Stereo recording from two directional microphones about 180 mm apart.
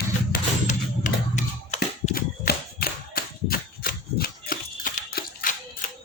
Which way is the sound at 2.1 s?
55° left (ahead or behind).